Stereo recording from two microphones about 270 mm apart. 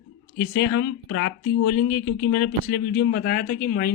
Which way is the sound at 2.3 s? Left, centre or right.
Left.